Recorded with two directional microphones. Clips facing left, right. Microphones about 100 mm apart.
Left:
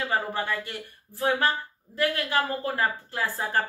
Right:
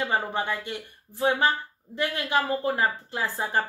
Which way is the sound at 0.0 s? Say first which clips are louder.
Right 1 dB; 20° right (ahead or behind).